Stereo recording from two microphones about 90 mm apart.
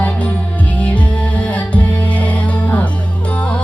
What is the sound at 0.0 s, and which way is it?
Music, 20° left (ahead or behind).